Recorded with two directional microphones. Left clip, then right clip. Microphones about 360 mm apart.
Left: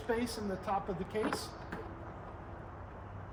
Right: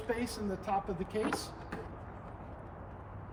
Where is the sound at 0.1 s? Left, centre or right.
Centre.